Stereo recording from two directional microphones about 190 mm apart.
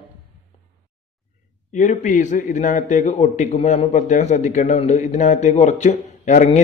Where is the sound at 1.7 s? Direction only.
40° left (ahead or behind).